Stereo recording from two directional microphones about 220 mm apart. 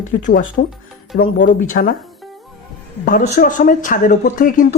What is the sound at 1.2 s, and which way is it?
Speech, 55° left (ahead or behind).